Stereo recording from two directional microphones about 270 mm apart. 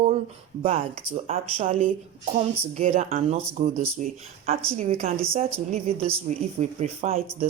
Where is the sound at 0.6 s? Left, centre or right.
Right.